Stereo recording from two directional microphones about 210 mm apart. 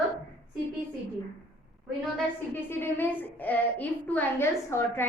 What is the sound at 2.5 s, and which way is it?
A woman's voice, 10° left (ahead or behind).